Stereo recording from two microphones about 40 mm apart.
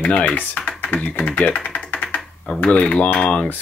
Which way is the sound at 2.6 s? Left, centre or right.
Left.